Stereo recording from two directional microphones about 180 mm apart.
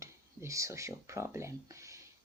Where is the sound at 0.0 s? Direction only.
15° right (ahead or behind).